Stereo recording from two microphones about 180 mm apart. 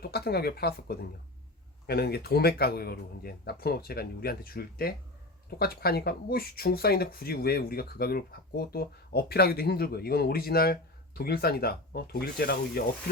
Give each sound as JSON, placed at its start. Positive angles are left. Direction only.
{"t": 0.0, "sound": "speech", "side_deg": 60}